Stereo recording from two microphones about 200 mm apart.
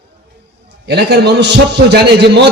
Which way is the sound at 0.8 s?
55° right (ahead or behind).